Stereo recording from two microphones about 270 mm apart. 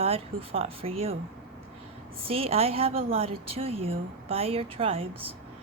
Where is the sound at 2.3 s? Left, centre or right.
Right.